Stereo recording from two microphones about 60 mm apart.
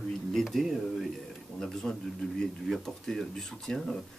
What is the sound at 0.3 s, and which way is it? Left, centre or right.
A woman's voice, centre.